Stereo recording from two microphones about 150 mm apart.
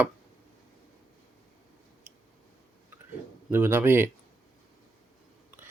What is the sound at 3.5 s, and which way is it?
Speech, 15° right (ahead or behind).